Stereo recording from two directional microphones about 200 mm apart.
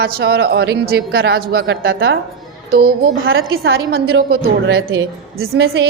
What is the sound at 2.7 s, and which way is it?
Speech, 50° right (ahead or behind).